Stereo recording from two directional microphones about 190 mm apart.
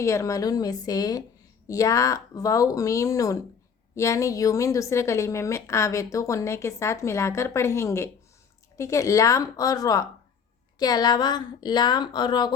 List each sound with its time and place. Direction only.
0.0 s a woman's voice: 15° left (ahead or behind)